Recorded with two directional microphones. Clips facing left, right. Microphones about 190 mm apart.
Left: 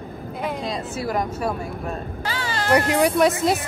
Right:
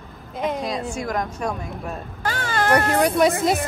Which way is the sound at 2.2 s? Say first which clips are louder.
Right 6 dB; 50° right (ahead or behind).